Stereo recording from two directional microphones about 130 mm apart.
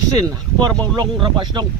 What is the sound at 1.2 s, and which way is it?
Speech, 35° right (ahead or behind).